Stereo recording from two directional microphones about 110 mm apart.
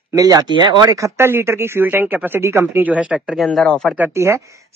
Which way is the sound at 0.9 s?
25° right (ahead or behind).